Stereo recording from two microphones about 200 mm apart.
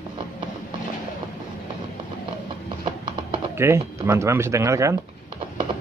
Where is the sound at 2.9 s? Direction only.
25° right (ahead or behind).